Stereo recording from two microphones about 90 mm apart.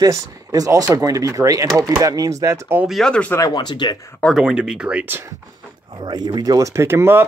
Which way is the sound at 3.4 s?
55° left (ahead or behind).